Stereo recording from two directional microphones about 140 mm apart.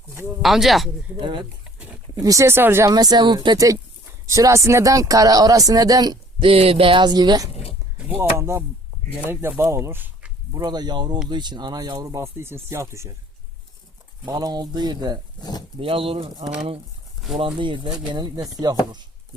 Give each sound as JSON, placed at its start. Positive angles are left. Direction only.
{"t": 0.4, "sound": "speech", "side_deg": 0}
{"t": 1.2, "sound": "speech", "side_deg": -35}
{"t": 2.1, "sound": "speech", "side_deg": -25}
{"t": 6.5, "sound": "speech", "side_deg": -45}
{"t": 10.5, "sound": "speech", "side_deg": -30}
{"t": 14.3, "sound": "speech", "side_deg": -25}
{"t": 15.4, "sound": "speech", "side_deg": 30}
{"t": 15.8, "sound": "speech", "side_deg": -40}
{"t": 17.3, "sound": "speech", "side_deg": -40}